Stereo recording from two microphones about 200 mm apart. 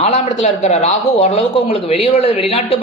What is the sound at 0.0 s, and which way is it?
A man's voice, 35° left (ahead or behind).